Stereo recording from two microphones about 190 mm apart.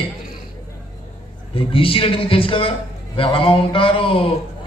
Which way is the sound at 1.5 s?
30° left (ahead or behind).